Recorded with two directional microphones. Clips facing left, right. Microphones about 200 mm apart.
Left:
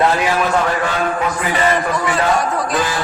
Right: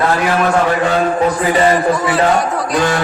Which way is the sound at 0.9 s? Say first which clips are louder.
Right 5 dB; 35° right (ahead or behind).